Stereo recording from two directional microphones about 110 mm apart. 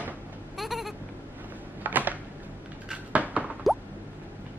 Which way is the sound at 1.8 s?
15° right (ahead or behind).